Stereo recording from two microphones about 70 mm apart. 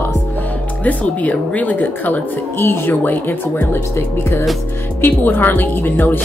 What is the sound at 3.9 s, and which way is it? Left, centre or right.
Music, left.